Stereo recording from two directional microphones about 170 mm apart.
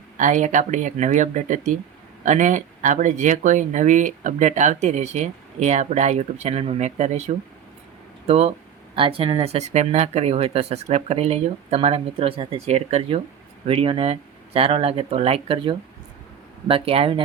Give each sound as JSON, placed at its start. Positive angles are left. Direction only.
{"t": 0.2, "sound": "speech", "side_deg": -45}